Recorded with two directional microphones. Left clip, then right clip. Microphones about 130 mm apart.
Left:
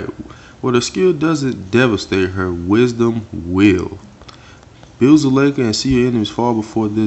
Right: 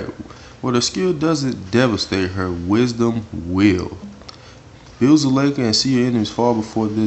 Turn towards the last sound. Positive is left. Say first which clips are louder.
# left 2 dB
turn(degrees=15)  # may be behind; listen again after turning